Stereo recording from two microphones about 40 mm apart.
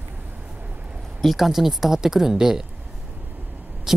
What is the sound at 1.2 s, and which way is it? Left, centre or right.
A man's voice, centre.